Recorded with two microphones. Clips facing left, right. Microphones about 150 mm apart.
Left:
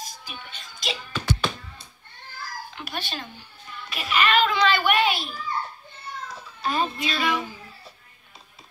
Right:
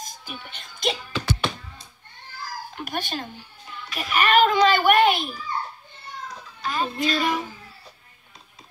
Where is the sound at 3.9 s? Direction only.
45° right (ahead or behind).